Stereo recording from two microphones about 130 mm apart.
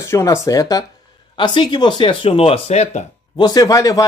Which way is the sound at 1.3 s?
40° left (ahead or behind).